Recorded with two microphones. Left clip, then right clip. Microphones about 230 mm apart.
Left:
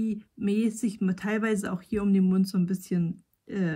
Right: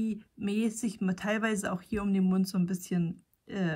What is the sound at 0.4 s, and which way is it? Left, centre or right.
Speech, centre.